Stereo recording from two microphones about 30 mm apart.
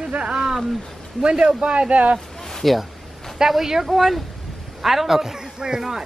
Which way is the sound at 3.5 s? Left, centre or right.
Centre.